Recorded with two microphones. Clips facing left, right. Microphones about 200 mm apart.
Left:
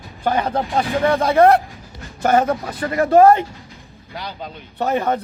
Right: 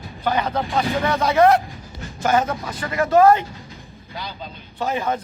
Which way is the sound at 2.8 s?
35° left (ahead or behind).